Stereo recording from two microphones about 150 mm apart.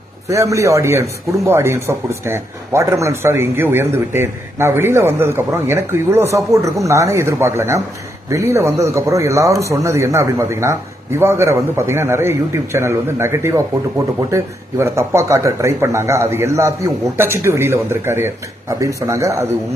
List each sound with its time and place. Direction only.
0.3 s a man's voice: 20° right (ahead or behind)